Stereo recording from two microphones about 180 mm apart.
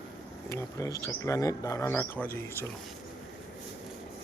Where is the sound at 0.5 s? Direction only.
20° left (ahead or behind).